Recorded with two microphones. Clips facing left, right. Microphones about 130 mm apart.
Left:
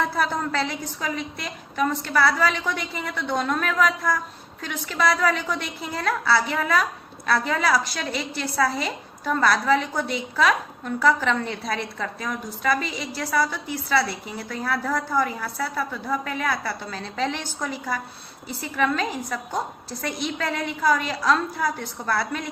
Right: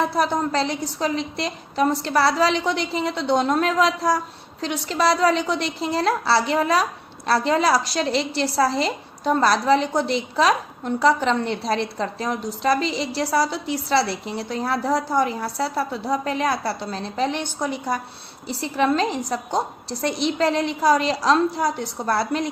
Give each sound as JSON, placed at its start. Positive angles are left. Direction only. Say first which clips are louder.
{"t": 0.0, "sound": "a woman's voice", "louder": "right 3 dB", "side_deg": -20}